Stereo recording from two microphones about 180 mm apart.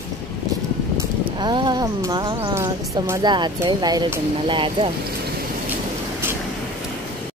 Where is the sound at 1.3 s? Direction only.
25° right (ahead or behind).